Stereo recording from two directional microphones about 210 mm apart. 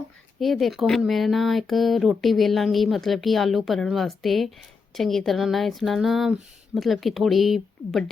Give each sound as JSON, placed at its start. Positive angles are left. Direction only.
{"t": 0.3, "sound": "speech", "side_deg": 0}